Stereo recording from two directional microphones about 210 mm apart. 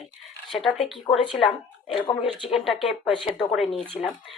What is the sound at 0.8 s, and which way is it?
Speech, centre (ahead or behind).